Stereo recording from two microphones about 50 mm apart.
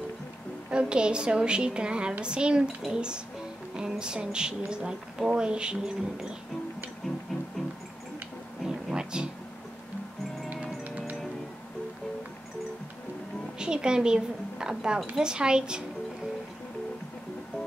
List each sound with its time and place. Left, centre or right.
0.7 s a woman's voice: centre
8.6 s a sound: centre
13.6 s a woman's voice: centre